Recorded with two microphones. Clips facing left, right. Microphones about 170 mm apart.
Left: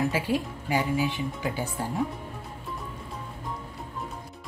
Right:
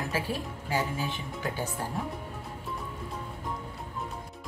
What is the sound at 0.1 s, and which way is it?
Speech, 15° left (ahead or behind).